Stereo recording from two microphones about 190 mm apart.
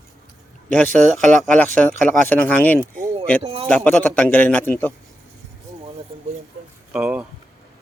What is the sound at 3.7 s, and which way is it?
A man's voice, 5° left (ahead or behind).